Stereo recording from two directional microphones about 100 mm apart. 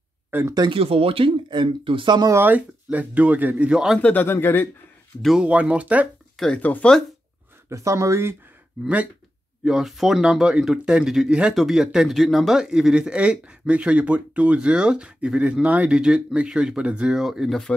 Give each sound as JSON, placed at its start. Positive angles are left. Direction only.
{"t": 0.3, "sound": "speech", "side_deg": -20}
{"t": 0.7, "sound": "speech", "side_deg": -70}
{"t": 2.3, "sound": "a man's voice", "side_deg": -20}
{"t": 4.0, "sound": "speech", "side_deg": 20}
{"t": 5.2, "sound": "a man's voice", "side_deg": -5}
{"t": 6.3, "sound": "speech", "side_deg": 5}
{"t": 7.7, "sound": "speech", "side_deg": -30}
{"t": 8.8, "sound": "a man's voice", "side_deg": -15}
{"t": 9.7, "sound": "a man's voice", "side_deg": -5}